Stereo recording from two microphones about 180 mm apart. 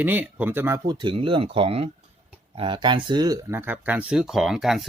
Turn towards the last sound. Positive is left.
turn(degrees=0)  # may be behind; listen again after turning